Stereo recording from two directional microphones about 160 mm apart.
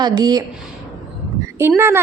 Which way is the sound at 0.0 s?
25° right (ahead or behind).